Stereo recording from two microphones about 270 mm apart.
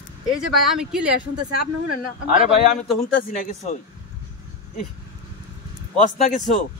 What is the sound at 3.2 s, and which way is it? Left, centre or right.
Speech, left.